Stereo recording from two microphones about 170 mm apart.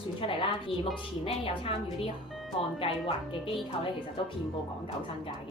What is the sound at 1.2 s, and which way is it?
Speech, 35° left (ahead or behind).